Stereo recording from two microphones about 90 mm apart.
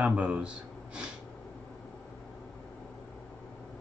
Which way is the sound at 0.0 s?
15° right (ahead or behind).